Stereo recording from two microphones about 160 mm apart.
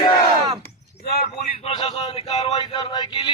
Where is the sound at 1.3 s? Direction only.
40° left (ahead or behind).